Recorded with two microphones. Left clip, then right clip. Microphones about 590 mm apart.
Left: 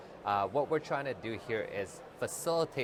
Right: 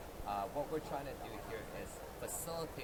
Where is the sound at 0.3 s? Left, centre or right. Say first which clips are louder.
Left 9 dB; left.